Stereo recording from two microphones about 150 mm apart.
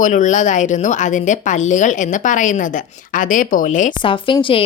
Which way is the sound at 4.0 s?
35° left (ahead or behind).